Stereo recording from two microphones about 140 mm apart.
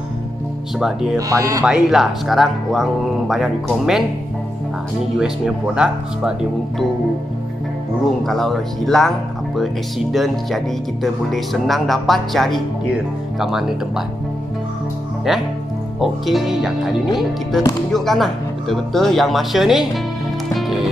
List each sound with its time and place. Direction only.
0.7 s speech: centre (ahead or behind)
1.1 s speech: 25° right (ahead or behind)
1.7 s speech: centre (ahead or behind)
5.1 s speech: centre (ahead or behind)
8.3 s speech: centre (ahead or behind)
16.0 s speech: centre (ahead or behind)
20.5 s music: centre (ahead or behind)